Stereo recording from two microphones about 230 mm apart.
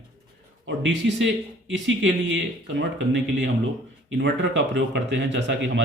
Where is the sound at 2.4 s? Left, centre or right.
Right.